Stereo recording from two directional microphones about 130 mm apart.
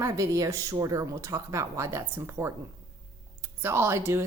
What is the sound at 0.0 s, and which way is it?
Speech, 25° right (ahead or behind).